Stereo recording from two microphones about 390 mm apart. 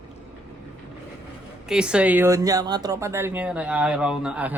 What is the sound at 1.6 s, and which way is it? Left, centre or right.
Speech, centre.